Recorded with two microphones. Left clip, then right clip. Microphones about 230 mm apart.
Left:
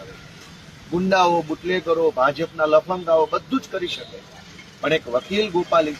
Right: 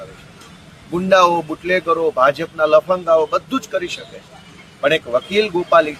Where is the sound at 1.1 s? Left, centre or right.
Centre.